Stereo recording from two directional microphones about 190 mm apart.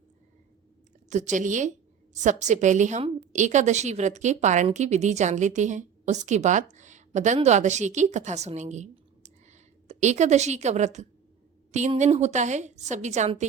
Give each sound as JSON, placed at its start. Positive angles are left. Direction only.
{"t": 1.1, "sound": "a woman's voice", "side_deg": -40}